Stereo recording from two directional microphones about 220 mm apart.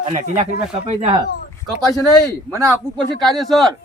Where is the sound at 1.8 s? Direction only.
15° right (ahead or behind).